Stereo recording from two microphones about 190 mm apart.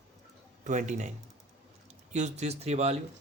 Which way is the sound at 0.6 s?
40° right (ahead or behind).